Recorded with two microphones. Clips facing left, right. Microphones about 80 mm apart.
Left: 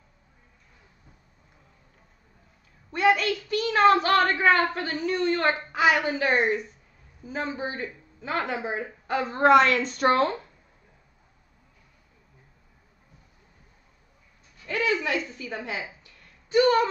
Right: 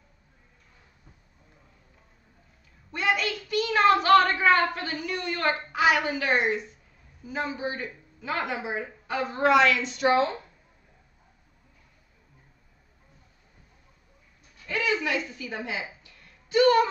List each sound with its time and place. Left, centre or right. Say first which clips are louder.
2.9 s a woman's voice: left 5 dB; left
14.7 s speech: left 1 dB; left
15.2 s a sound: even; left